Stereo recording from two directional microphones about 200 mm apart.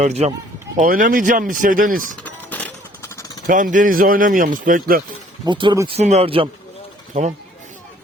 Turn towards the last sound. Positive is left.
turn(degrees=-35)  # may be behind; listen again after turning